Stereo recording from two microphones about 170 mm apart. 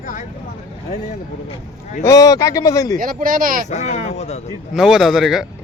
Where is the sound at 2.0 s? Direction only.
20° left (ahead or behind).